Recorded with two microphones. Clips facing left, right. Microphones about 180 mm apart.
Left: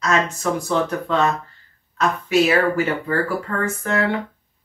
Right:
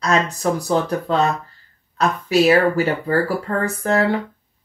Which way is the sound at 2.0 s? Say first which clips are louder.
Right 1 dB; 35° right (ahead or behind).